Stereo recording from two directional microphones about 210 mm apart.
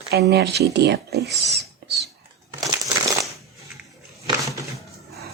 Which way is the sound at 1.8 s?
50° right (ahead or behind).